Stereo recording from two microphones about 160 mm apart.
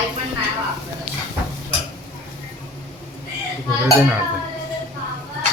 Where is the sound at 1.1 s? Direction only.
75° left (ahead or behind).